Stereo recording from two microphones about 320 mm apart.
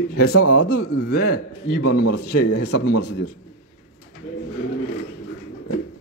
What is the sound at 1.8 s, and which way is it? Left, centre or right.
Speech, left.